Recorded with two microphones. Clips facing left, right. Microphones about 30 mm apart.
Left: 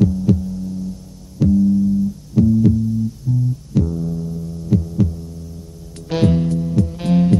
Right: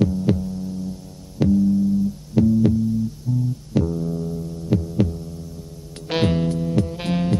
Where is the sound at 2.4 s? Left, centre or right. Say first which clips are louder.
Left 2 dB; right.